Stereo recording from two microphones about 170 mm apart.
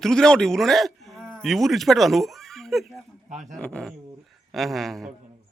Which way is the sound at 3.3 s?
45° right (ahead or behind).